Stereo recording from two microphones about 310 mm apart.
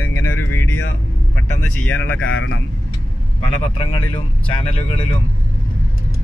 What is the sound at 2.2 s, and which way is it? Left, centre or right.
Speech, left.